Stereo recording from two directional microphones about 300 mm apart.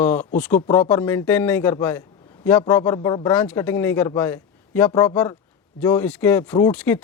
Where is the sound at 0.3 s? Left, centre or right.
Centre.